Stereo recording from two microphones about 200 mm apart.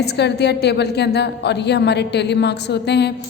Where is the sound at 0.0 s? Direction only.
55° left (ahead or behind).